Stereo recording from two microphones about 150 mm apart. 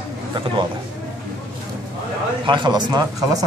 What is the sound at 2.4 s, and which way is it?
Speech, 30° right (ahead or behind).